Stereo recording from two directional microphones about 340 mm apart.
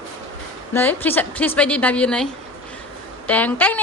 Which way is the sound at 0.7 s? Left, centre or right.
Centre.